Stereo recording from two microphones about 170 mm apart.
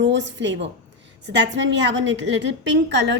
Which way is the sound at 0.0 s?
90° right.